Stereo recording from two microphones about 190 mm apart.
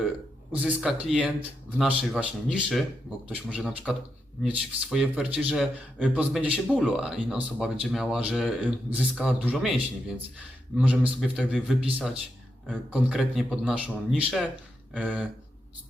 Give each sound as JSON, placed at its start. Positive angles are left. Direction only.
{"t": 0.5, "sound": "a man's voice", "side_deg": -5}
{"t": 10.8, "sound": "a man's voice", "side_deg": -5}